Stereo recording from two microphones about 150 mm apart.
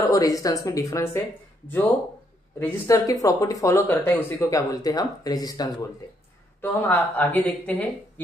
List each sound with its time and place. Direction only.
0.0 s speech: 25° left (ahead or behind)
2.6 s speech: 20° left (ahead or behind)
6.6 s speech: 10° left (ahead or behind)